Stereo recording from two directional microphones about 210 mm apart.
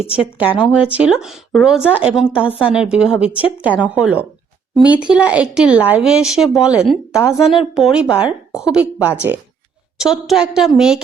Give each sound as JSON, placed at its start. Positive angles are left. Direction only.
{"t": 0.0, "sound": "speech", "side_deg": -5}
{"t": 3.2, "sound": "a woman's voice", "side_deg": 25}
{"t": 3.8, "sound": "speech", "side_deg": -5}